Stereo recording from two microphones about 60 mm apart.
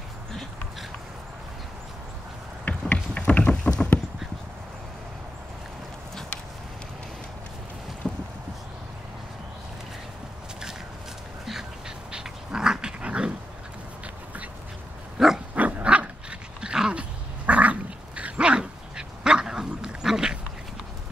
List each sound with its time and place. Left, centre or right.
2.8 s clip-clop: centre
8.0 s boat: centre
12.1 s dog: centre
14.0 s duck: right
15.1 s dog: centre
15.5 s dog: right